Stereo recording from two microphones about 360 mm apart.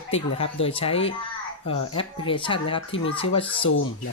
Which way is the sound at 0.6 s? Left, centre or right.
Centre.